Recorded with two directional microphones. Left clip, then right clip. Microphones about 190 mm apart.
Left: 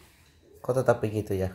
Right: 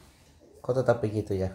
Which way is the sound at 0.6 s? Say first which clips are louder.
Left 1 dB; 25° left (ahead or behind).